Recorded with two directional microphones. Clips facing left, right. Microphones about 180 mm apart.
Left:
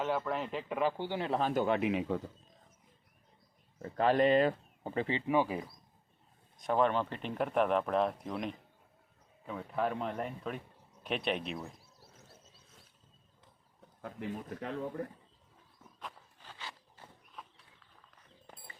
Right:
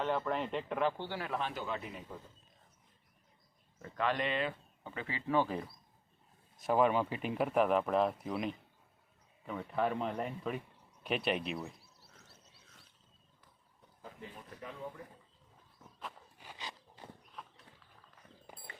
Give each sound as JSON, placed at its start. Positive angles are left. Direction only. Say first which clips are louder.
{"t": 0.0, "sound": "speech", "louder": "even", "side_deg": 5}
{"t": 1.0, "sound": "speech", "louder": "left 5 dB", "side_deg": 20}
{"t": 1.3, "sound": "speech", "louder": "left 9 dB", "side_deg": 40}
{"t": 1.6, "sound": "speech", "louder": "left 11 dB", "side_deg": 70}
{"t": 3.8, "sound": "speech", "louder": "left 7 dB", "side_deg": 35}
{"t": 5.2, "sound": "speech", "louder": "right 1 dB", "side_deg": 15}
{"t": 6.6, "sound": "speech", "louder": "even", "side_deg": -5}
{"t": 14.6, "sound": "speech", "louder": "left 6 dB", "side_deg": 70}
{"t": 16.4, "sound": "walk", "louder": "right 1 dB", "side_deg": -15}
{"t": 18.5, "sound": "walk", "louder": "right 1 dB", "side_deg": -10}